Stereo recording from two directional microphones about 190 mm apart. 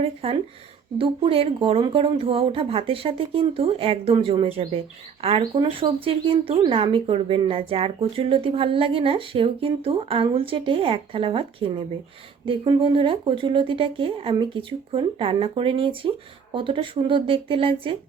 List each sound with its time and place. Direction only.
0.0 s speech: 30° right (ahead or behind)